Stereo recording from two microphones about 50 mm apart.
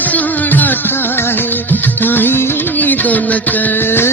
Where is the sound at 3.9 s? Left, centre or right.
Left.